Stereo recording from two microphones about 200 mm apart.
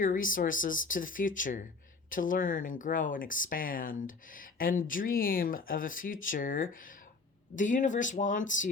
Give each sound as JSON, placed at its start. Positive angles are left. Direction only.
{"t": 0.0, "sound": "speech", "side_deg": 45}